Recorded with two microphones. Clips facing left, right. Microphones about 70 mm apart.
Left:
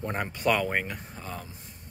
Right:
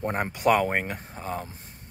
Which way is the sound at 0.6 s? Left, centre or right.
Right.